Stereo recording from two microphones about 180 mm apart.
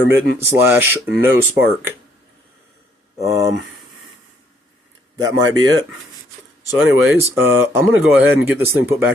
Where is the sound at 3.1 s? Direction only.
15° right (ahead or behind).